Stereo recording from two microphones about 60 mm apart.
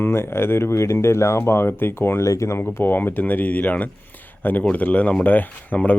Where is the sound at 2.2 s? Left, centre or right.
Left.